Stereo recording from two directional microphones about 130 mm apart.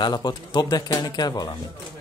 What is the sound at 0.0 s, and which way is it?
Speech, 35° left (ahead or behind).